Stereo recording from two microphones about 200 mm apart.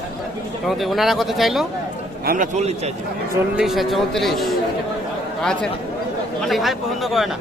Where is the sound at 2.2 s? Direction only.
40° right (ahead or behind).